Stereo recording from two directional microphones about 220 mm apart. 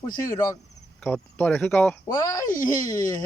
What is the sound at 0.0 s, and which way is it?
Speech, 15° left (ahead or behind).